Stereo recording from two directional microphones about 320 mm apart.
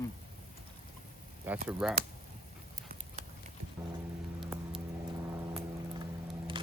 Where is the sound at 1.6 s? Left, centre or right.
Centre.